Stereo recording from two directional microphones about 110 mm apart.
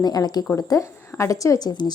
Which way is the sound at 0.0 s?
35° left (ahead or behind).